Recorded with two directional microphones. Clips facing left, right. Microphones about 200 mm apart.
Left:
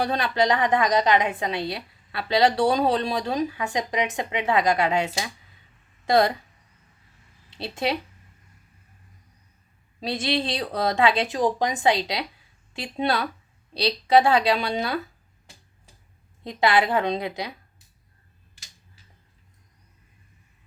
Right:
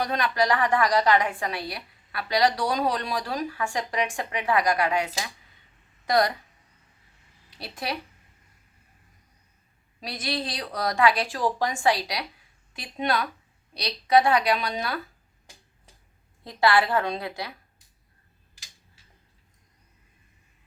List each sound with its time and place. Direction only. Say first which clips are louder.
0.0 s a woman's voice: left 2 dB; 30° left (ahead or behind)
7.5 s a woman's voice: left 6 dB; 25° left (ahead or behind)
10.0 s a woman's voice: left 6 dB; 25° left (ahead or behind)
16.4 s a woman's voice: left 1 dB; 20° left (ahead or behind)